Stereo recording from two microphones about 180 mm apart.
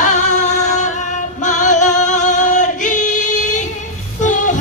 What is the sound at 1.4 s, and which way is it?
Singing, 45° left (ahead or behind).